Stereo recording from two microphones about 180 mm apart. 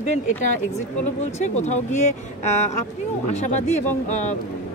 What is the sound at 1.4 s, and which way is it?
Speech, 40° left (ahead or behind).